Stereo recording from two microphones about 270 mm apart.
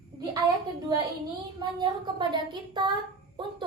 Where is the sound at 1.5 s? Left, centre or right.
Centre.